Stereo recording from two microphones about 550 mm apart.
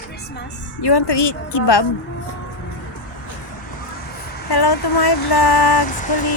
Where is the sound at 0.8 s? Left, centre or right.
Left.